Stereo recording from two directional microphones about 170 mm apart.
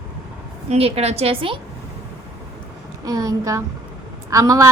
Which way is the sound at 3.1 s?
20° right (ahead or behind).